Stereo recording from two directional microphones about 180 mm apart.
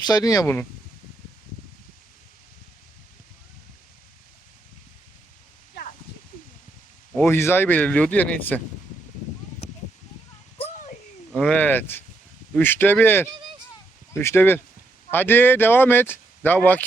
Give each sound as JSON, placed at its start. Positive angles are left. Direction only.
{"t": 0.0, "sound": "speech", "side_deg": 20}
{"t": 7.3, "sound": "speech", "side_deg": 15}
{"t": 11.3, "sound": "speech", "side_deg": 5}